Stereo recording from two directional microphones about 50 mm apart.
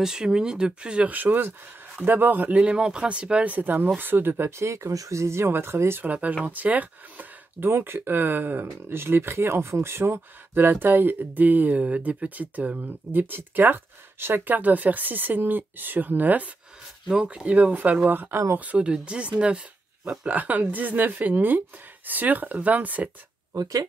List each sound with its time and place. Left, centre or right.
0.0 s speech: centre
1.0 s speech: right
2.6 s speech: centre
3.5 s speech: right
6.0 s speech: right
7.7 s speech: right
17.1 s speech: centre
17.5 s speech: right
17.9 s speech: right
18.6 s speech: right